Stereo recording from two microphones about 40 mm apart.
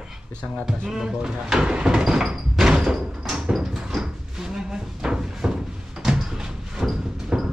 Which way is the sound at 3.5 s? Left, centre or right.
Centre.